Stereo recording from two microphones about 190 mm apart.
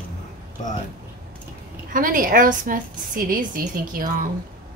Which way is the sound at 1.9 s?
45° right (ahead or behind).